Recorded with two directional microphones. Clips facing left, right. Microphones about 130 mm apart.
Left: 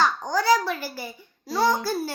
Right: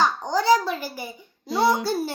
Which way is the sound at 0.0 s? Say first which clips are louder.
Right 1 dB; 20° right (ahead or behind).